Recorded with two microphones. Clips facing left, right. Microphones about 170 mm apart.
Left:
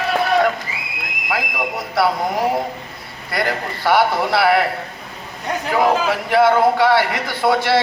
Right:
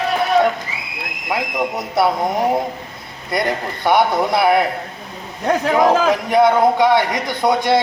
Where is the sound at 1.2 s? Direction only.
20° right (ahead or behind).